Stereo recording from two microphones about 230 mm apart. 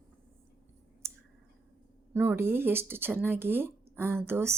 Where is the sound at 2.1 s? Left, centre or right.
Centre.